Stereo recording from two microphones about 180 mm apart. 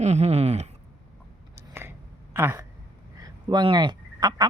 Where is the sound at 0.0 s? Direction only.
35° right (ahead or behind).